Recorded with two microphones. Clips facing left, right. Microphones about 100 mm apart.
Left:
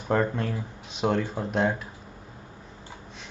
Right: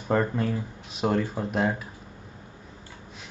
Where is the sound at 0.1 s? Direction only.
Centre (ahead or behind).